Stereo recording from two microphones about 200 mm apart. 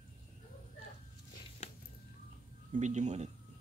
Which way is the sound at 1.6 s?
35° left (ahead or behind).